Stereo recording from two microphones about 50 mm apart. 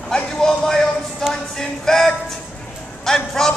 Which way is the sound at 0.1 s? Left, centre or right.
Centre.